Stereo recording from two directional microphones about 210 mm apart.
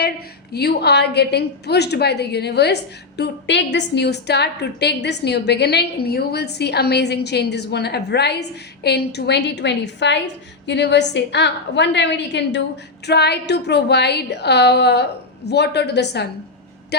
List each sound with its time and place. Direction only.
0.5 s a woman's voice: 50° left (ahead or behind)
16.9 s music: 50° left (ahead or behind)